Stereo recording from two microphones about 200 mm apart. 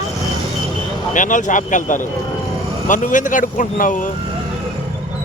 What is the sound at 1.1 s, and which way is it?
Speech, 40° left (ahead or behind).